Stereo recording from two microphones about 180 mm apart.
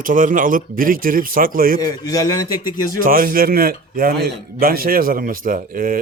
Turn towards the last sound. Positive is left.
turn(degrees=-50)  # may be behind; listen again after turning